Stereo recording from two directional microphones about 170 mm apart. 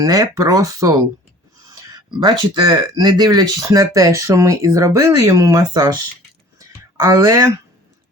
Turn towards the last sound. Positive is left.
turn(degrees=-20)  # may be behind; listen again after turning